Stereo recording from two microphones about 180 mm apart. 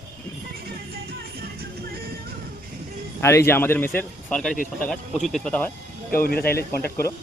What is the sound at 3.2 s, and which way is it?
Speech, 15° left (ahead or behind).